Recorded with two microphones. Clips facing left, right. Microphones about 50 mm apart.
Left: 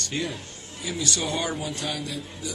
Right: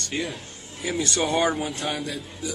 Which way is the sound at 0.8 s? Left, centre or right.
Right.